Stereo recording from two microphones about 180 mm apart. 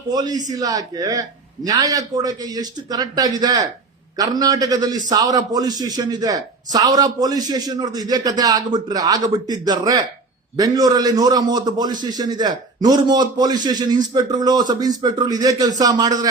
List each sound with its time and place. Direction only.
0.1 s a man's voice: 20° right (ahead or behind)